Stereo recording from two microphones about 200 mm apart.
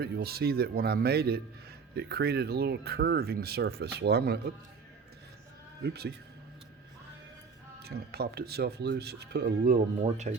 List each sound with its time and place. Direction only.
0.0 s speech: 50° right (ahead or behind)
5.8 s speech: 55° right (ahead or behind)
7.8 s speech: 50° right (ahead or behind)
10.0 s speech: 40° right (ahead or behind)